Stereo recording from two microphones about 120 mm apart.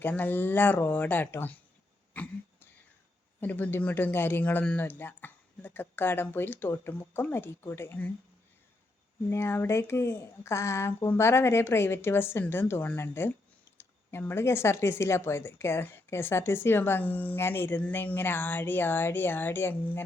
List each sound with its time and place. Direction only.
0.0 s speech: 15° left (ahead or behind)
2.1 s throat clearing: 10° left (ahead or behind)
3.4 s speech: 15° left (ahead or behind)
9.3 s speech: 20° left (ahead or behind)